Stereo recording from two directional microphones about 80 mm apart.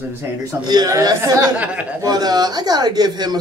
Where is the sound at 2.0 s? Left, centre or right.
Right.